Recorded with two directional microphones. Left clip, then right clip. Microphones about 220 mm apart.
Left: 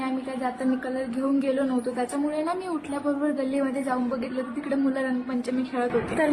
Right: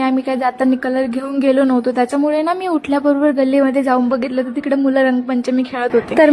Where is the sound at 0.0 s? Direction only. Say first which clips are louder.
Right 13 dB; 45° right (ahead or behind).